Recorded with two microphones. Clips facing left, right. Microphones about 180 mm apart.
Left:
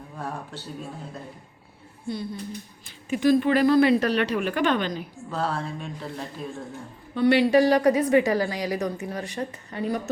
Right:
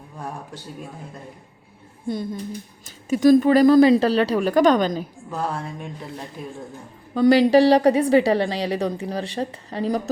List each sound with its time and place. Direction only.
2.0 s a woman's voice: 45° right (ahead or behind)
5.3 s a woman's voice: 15° right (ahead or behind)
7.1 s speech: 40° right (ahead or behind)